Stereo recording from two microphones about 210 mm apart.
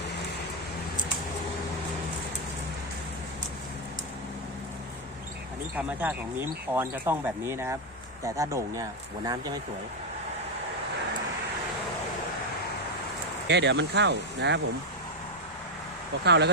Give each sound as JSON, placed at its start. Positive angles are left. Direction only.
{"t": 5.7, "sound": "speech", "side_deg": -10}
{"t": 13.5, "sound": "speech", "side_deg": -55}
{"t": 16.2, "sound": "speech", "side_deg": -55}